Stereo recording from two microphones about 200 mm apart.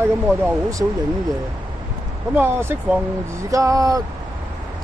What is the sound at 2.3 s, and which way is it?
Speech, 10° right (ahead or behind).